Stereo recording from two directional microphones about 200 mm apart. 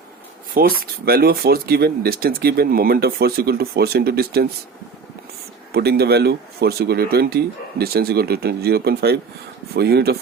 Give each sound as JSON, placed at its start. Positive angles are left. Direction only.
{"t": 0.5, "sound": "speech", "side_deg": -50}
{"t": 5.7, "sound": "speech", "side_deg": -50}